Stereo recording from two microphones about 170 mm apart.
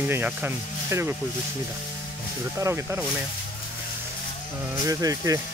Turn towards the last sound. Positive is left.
turn(degrees=-20)  # may be behind; listen again after turning